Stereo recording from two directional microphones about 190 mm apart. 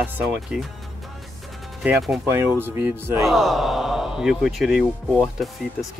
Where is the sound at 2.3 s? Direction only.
10° right (ahead or behind).